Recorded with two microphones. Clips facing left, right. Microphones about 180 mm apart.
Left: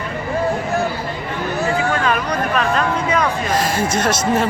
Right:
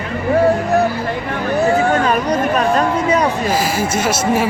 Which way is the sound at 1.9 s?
40° right (ahead or behind).